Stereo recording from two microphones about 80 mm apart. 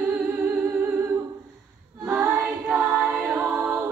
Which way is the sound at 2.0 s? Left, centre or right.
Centre.